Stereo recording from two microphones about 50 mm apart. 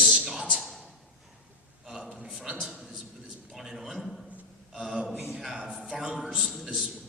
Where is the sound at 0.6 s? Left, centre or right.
Centre.